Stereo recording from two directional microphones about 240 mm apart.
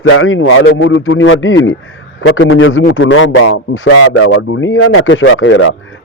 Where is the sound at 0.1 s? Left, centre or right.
Left.